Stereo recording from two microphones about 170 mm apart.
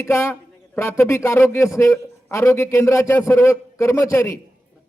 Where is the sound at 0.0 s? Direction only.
15° left (ahead or behind).